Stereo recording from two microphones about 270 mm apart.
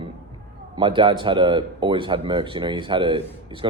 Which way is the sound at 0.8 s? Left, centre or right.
Centre.